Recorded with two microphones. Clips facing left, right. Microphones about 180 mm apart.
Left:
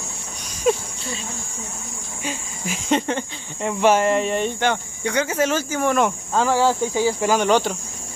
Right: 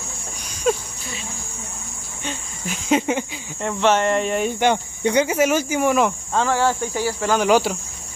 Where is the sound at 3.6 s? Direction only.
10° left (ahead or behind).